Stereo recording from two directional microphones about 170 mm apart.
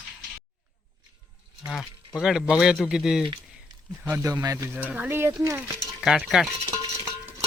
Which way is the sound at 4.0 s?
15° right (ahead or behind).